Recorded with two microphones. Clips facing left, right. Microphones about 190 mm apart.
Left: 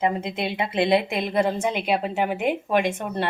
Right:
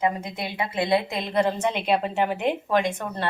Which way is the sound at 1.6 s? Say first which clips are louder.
Even; 5° left (ahead or behind).